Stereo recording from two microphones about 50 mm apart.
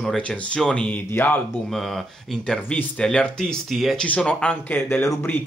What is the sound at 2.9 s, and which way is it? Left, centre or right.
Speech, centre.